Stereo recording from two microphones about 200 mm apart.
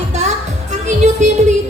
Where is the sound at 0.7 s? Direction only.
35° right (ahead or behind).